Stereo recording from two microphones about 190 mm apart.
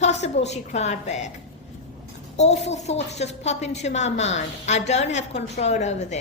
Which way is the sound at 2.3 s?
35° left (ahead or behind).